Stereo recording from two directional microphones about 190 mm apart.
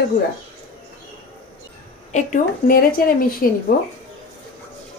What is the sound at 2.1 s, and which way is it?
A woman's voice, 45° left (ahead or behind).